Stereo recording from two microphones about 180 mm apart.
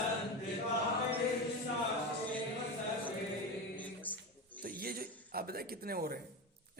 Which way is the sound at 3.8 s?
10° left (ahead or behind).